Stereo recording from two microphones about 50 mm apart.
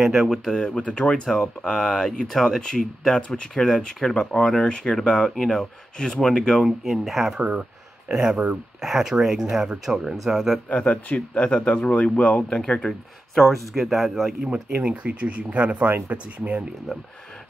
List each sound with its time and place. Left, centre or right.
0.0 s speech: centre
0.5 s speech: centre
0.7 s speech: left
6.6 s speech: centre
8.1 s speech: centre
10.7 s speech: left
13.3 s speech: centre
14.4 s speech: right